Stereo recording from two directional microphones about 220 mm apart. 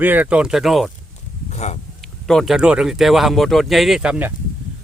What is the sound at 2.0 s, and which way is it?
Speech, centre (ahead or behind).